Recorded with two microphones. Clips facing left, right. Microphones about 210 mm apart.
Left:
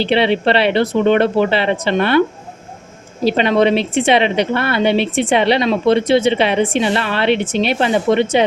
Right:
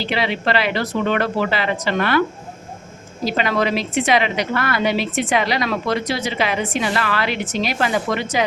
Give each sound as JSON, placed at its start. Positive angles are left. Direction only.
{"t": 0.0, "sound": "a woman's voice", "side_deg": 30}
{"t": 3.2, "sound": "a woman's voice", "side_deg": 25}